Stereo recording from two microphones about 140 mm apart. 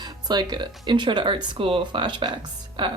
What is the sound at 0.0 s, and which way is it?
Speech, 30° right (ahead or behind).